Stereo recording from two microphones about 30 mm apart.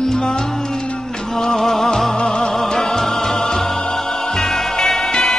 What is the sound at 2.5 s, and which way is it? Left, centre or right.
Music, centre.